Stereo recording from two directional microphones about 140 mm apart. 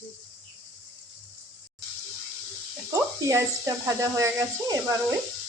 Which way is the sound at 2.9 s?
20° right (ahead or behind).